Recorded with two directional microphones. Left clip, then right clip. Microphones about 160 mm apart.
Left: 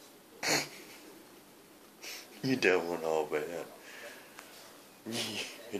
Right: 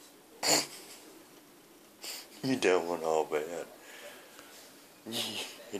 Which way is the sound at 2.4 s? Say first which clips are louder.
Even; 40° right (ahead or behind).